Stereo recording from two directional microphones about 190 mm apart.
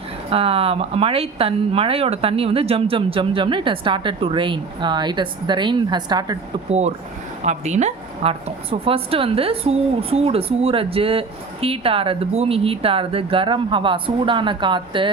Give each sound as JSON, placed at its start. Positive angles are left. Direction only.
{"t": 0.3, "sound": "a woman's voice", "side_deg": -30}
{"t": 6.7, "sound": "a woman's voice", "side_deg": -35}